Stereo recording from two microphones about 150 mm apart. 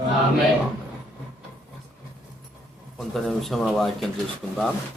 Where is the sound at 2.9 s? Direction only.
Centre (ahead or behind).